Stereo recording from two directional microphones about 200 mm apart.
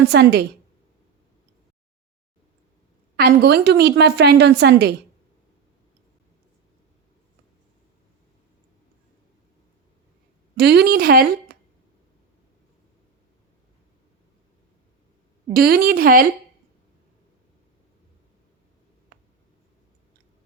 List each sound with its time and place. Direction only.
0.0 s a woman's voice: 55° right (ahead or behind)
3.2 s a woman's voice: 55° right (ahead or behind)
10.6 s a woman's voice: 55° right (ahead or behind)
15.5 s a woman's voice: 50° right (ahead or behind)
19.1 s a sound: 50° right (ahead or behind)